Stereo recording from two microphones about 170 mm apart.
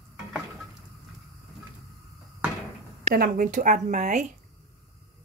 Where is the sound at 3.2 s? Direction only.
55° right (ahead or behind).